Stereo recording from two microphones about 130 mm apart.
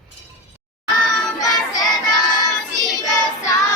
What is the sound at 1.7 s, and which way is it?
Child singing, 30° left (ahead or behind).